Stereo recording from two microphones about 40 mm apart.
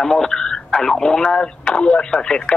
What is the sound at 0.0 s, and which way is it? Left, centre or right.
Speech, centre.